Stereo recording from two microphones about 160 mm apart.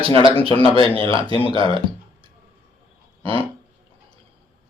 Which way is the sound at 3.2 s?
35° right (ahead or behind).